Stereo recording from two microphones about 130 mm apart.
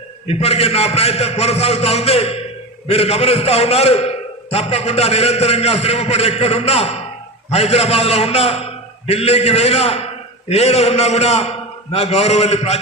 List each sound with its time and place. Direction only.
0.3 s a man's voice: 50° left (ahead or behind)